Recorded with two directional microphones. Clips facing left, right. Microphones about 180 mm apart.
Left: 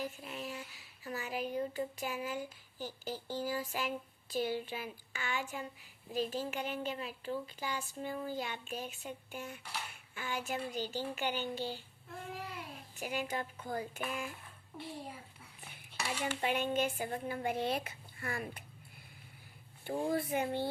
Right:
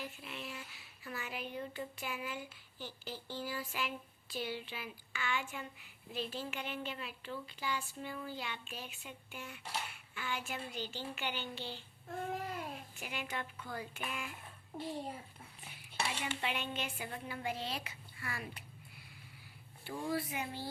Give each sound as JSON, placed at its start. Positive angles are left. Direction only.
{"t": 0.0, "sound": "a sound", "side_deg": 40}
{"t": 1.0, "sound": "speech", "side_deg": 40}
{"t": 12.0, "sound": "child singing", "side_deg": -50}
{"t": 13.0, "sound": "speech", "side_deg": 40}
{"t": 16.2, "sound": "speech", "side_deg": 45}